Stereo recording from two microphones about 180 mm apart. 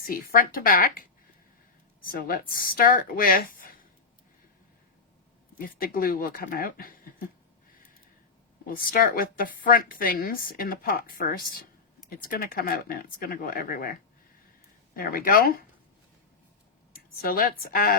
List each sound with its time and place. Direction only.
0.0 s a woman's voice: 50° left (ahead or behind)
5.5 s a woman's voice: 50° left (ahead or behind)
8.6 s a woman's voice: 55° left (ahead or behind)
14.9 s a woman's voice: 50° left (ahead or behind)
16.9 s a sound: 55° left (ahead or behind)
17.7 s a woman's voice: 55° left (ahead or behind)